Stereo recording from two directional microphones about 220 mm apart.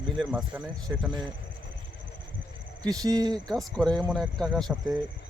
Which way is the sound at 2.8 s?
15° right (ahead or behind).